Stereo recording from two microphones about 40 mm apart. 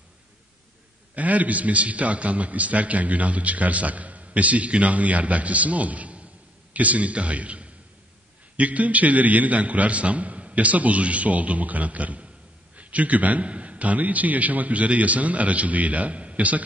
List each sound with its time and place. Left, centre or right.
1.1 s a man's voice: right